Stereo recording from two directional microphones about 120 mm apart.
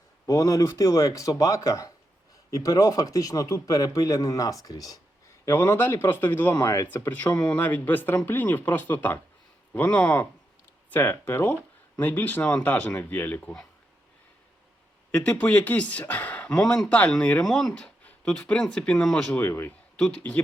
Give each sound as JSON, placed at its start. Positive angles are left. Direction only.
{"t": 0.3, "sound": "a man's voice", "side_deg": 25}
{"t": 5.5, "sound": "a man's voice", "side_deg": 20}
{"t": 6.9, "sound": "speech", "side_deg": 15}
{"t": 15.1, "sound": "speech", "side_deg": 10}